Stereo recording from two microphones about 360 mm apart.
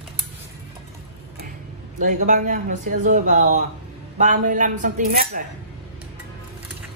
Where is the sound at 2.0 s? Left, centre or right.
Right.